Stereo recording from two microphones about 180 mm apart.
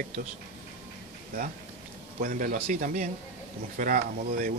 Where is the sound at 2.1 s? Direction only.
45° right (ahead or behind).